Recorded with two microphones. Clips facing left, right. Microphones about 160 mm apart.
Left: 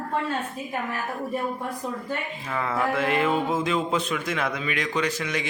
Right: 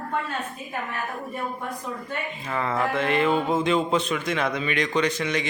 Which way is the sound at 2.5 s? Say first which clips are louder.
Even; centre (ahead or behind).